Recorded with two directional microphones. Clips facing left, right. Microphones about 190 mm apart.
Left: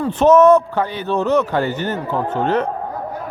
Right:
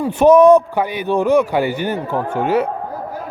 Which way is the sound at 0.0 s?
10° right (ahead or behind).